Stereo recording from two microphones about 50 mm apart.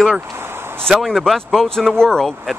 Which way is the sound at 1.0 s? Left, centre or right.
Centre.